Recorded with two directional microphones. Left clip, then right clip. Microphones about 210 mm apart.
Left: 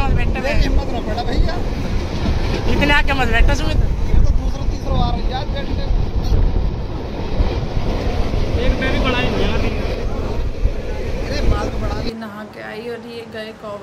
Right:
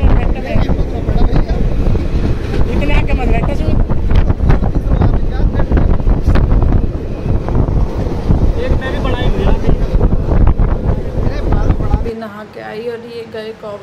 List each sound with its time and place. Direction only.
2.8 s vehicle: centre (ahead or behind)